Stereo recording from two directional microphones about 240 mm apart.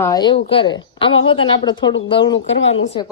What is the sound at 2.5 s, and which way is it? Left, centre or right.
Speech, left.